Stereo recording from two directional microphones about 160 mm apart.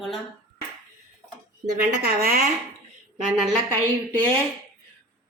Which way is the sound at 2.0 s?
70° right (ahead or behind).